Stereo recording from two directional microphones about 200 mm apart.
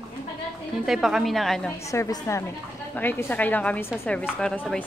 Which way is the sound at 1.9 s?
15° left (ahead or behind).